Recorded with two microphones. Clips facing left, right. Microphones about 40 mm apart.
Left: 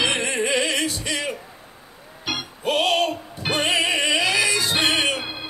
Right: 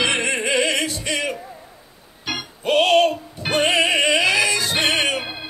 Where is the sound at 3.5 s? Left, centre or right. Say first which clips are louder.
Right 4 dB; right.